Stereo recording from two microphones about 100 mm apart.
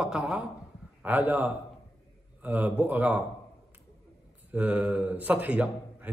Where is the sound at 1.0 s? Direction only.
15° right (ahead or behind).